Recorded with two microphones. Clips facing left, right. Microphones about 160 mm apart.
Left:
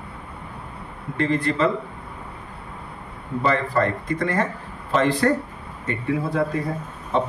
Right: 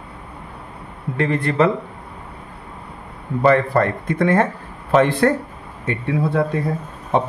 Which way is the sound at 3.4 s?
55° right (ahead or behind).